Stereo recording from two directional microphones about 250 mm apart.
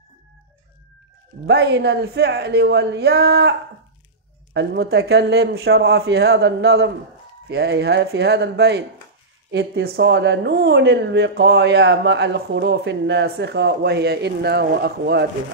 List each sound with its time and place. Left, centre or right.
1.5 s a man's voice: right
4.6 s a man's voice: right